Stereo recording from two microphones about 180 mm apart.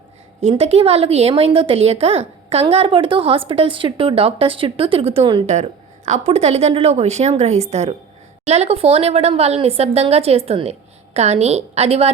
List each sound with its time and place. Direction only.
0.4 s a woman's voice: 35° right (ahead or behind)